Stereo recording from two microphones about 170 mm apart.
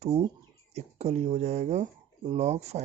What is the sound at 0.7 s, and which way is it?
Speech, 40° right (ahead or behind).